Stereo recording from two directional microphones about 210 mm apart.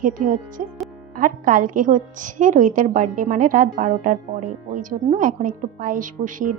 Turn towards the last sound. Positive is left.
turn(degrees=-40)  # may be behind; listen again after turning